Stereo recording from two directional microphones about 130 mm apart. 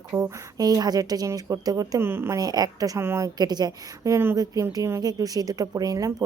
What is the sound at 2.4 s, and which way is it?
Speech, 30° right (ahead or behind).